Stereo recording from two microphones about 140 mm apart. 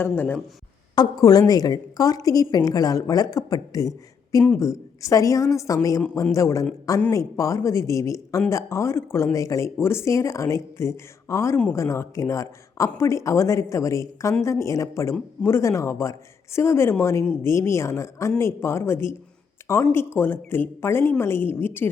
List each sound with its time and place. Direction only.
0.0 s a woman's voice: 15° left (ahead or behind)
0.9 s a woman's voice: 25° left (ahead or behind)